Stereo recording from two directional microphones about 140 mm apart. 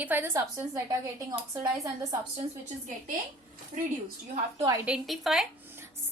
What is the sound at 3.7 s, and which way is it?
Speech, 60° right (ahead or behind).